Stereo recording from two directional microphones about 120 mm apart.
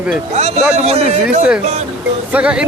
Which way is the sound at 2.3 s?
10° right (ahead or behind).